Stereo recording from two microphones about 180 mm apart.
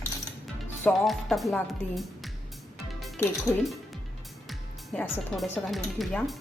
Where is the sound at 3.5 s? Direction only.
15° left (ahead or behind).